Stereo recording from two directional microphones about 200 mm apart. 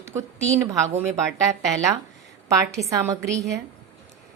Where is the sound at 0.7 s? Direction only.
15° right (ahead or behind).